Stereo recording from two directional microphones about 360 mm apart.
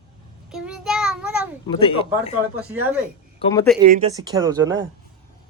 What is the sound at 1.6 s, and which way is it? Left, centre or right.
Speech, centre.